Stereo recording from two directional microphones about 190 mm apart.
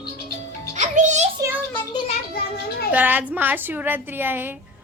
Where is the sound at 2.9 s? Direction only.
10° right (ahead or behind).